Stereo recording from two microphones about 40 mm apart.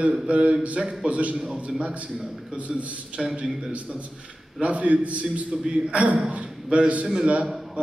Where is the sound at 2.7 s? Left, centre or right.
Centre.